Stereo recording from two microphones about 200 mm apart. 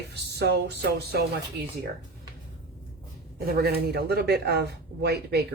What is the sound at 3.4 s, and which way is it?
Speech, 50° right (ahead or behind).